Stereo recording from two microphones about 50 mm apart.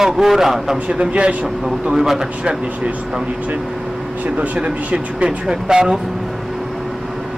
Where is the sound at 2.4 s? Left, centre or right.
Right.